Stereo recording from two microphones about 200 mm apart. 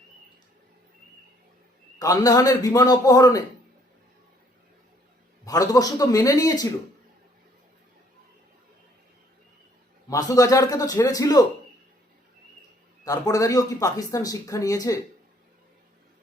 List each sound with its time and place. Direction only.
2.0 s speech: 20° left (ahead or behind)
5.5 s speech: 20° left (ahead or behind)
10.1 s speech: 15° left (ahead or behind)
13.1 s speech: 15° left (ahead or behind)